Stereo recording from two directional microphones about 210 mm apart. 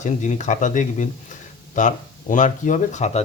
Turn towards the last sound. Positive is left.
turn(degrees=35)  # may be behind; listen again after turning